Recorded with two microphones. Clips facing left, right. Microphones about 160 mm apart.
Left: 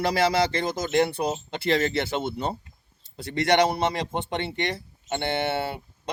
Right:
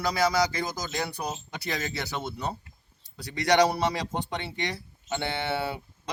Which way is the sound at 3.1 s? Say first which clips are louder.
Left 1 dB; 55° left (ahead or behind).